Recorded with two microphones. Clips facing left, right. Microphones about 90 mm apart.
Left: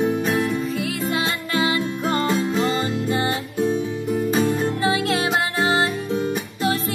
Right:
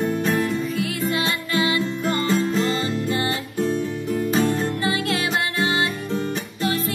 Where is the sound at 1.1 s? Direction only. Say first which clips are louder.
Even; 30° left (ahead or behind).